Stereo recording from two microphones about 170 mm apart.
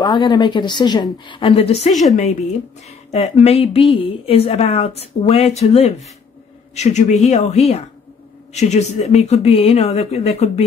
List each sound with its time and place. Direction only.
0.0 s a woman's voice: 25° left (ahead or behind)
1.9 s a woman's voice: centre (ahead or behind)
3.1 s a woman's voice: 40° left (ahead or behind)